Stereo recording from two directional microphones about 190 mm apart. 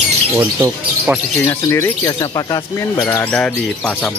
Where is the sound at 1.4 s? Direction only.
15° left (ahead or behind).